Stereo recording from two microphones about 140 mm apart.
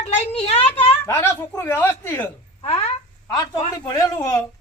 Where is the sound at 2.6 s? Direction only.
45° left (ahead or behind).